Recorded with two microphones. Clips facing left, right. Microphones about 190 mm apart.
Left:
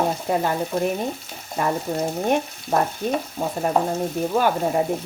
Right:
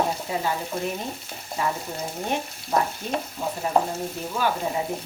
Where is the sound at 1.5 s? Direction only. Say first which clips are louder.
Left 5 dB; 55° left (ahead or behind).